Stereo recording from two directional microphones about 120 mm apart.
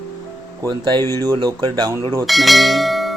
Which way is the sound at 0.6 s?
35° right (ahead or behind).